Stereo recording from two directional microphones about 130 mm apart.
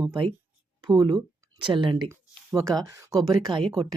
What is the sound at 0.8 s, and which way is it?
Speech, 30° right (ahead or behind).